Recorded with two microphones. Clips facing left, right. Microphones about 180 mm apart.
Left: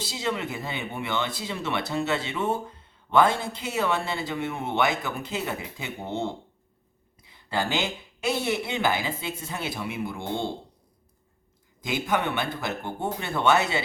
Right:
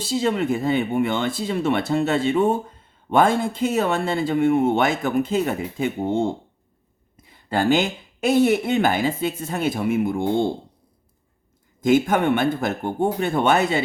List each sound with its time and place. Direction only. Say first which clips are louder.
0.1 s speech: right 10 dB; 45° right (ahead or behind)
11.8 s speech: right 9 dB; 50° right (ahead or behind)